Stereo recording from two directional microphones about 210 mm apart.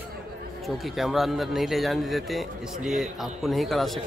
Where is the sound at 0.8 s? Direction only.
Centre (ahead or behind).